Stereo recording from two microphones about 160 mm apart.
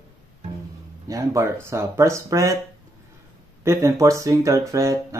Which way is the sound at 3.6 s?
20° right (ahead or behind).